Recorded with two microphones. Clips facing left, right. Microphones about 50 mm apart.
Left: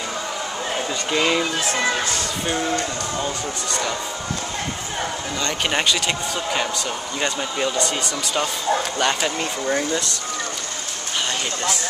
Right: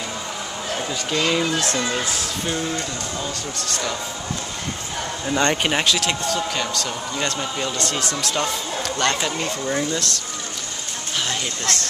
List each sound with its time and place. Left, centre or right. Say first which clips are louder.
0.7 s speech: left 1 dB; centre
2.4 s speech: left 2 dB; centre
5.6 s speech: even; centre
11.2 s speech: left 2 dB; centre